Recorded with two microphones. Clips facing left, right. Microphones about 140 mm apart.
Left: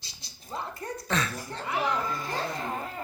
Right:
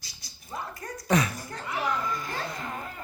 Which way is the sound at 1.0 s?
15° right (ahead or behind).